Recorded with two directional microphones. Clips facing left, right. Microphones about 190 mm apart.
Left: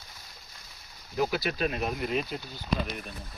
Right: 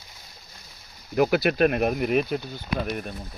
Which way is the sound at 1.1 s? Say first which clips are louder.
Right 8 dB; 65° right (ahead or behind).